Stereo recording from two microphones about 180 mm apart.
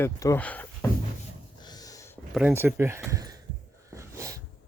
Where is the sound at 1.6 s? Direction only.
20° left (ahead or behind).